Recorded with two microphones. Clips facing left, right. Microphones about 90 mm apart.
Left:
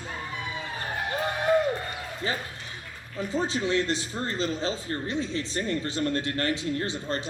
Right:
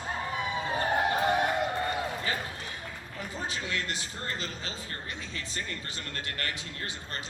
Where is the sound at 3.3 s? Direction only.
25° left (ahead or behind).